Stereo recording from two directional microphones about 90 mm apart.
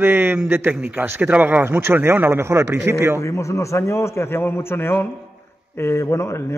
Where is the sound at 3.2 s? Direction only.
35° left (ahead or behind).